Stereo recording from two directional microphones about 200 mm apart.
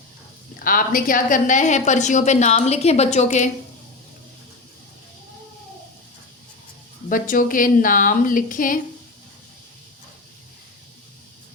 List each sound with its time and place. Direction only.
0.6 s a woman's voice: 45° left (ahead or behind)
7.1 s a woman's voice: 45° left (ahead or behind)